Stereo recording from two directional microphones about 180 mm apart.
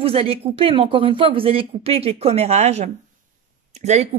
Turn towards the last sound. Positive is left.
turn(degrees=-40)  # may be behind; listen again after turning